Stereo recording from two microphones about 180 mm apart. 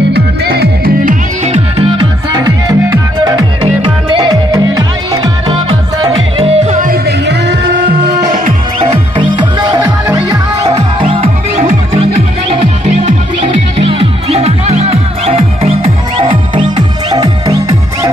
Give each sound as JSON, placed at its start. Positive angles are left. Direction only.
{"t": 0.1, "sound": "music", "side_deg": -60}
{"t": 2.3, "sound": "music", "side_deg": -20}
{"t": 6.9, "sound": "music", "side_deg": -65}
{"t": 8.3, "sound": "music", "side_deg": -30}
{"t": 11.0, "sound": "music", "side_deg": -30}